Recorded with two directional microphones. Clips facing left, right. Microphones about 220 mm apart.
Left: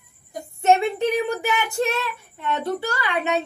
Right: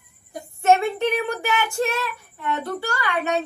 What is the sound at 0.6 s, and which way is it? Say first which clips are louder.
Speech: even; 20° left (ahead or behind).